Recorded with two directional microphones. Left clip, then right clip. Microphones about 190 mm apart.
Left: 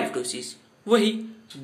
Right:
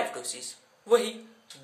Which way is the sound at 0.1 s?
5° right (ahead or behind).